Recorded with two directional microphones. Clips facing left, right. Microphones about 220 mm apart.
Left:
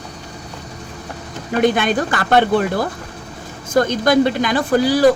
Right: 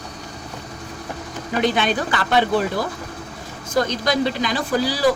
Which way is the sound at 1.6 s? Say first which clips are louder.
Left 4 dB; 50° left (ahead or behind).